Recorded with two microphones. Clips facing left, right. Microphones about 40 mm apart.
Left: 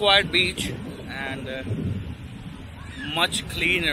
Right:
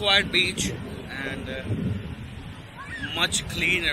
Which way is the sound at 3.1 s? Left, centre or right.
Centre.